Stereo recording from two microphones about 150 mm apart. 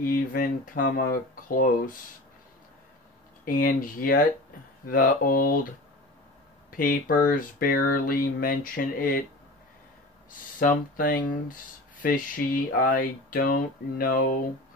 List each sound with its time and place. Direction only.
0.0 s speech: 70° left (ahead or behind)
3.4 s speech: 70° left (ahead or behind)
6.7 s speech: 65° left (ahead or behind)
10.6 s speech: 70° left (ahead or behind)